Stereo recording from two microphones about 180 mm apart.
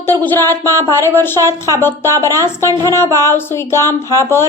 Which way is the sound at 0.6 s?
20° right (ahead or behind).